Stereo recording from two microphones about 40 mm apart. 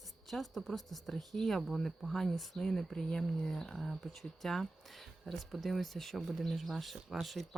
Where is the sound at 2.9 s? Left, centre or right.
Centre.